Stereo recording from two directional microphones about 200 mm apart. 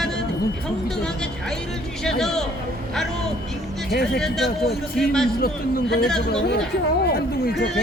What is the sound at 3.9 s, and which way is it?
Speech, centre (ahead or behind).